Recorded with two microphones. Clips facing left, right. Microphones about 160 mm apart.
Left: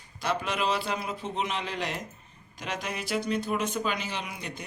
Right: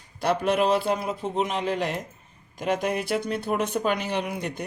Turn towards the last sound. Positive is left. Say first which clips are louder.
# right 8 dB
turn(degrees=-60)  # may be behind; listen again after turning